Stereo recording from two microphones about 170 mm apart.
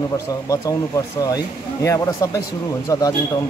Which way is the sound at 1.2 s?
20° left (ahead or behind).